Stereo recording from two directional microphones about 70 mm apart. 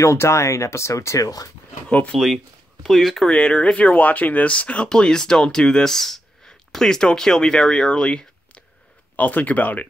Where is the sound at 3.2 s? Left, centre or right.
Centre.